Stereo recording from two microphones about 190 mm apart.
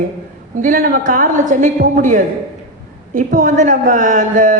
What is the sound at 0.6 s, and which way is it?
A man's voice, 45° right (ahead or behind).